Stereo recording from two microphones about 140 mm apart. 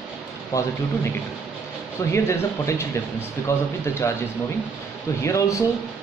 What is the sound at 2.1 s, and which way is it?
Speech, 20° left (ahead or behind).